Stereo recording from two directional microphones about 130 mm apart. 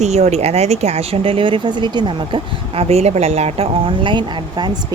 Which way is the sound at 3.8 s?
40° right (ahead or behind).